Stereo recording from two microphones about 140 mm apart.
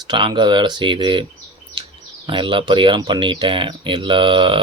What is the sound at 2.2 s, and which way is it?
Speech, 35° right (ahead or behind).